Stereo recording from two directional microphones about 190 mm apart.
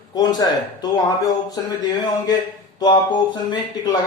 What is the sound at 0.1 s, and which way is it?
Speech, 20° left (ahead or behind).